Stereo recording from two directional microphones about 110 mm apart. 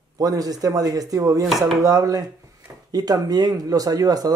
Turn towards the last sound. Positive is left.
turn(degrees=-35)  # may be behind; listen again after turning